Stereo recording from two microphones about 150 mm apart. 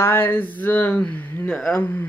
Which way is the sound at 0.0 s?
15° left (ahead or behind).